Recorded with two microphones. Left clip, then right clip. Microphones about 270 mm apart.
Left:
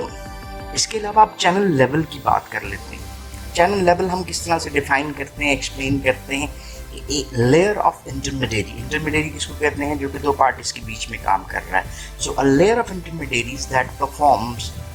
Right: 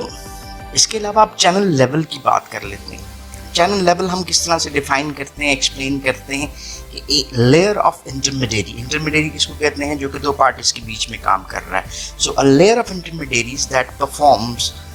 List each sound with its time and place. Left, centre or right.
0.7 s speech: centre